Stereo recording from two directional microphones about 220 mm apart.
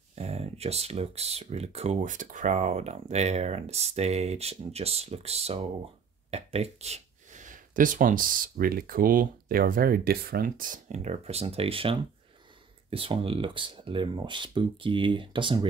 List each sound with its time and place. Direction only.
0.1 s speech: 30° right (ahead or behind)